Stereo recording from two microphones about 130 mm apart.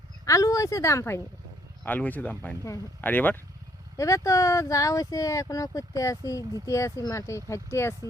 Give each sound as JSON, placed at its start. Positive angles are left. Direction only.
{"t": 0.3, "sound": "speech", "side_deg": 25}
{"t": 3.9, "sound": "speech", "side_deg": 25}